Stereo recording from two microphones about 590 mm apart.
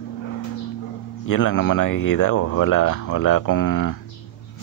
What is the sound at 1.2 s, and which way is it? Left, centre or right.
Speech, left.